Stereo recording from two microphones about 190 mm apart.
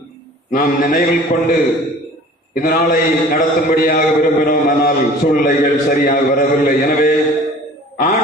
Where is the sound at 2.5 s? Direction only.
45° left (ahead or behind).